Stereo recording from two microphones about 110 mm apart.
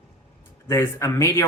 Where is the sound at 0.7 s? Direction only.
25° left (ahead or behind).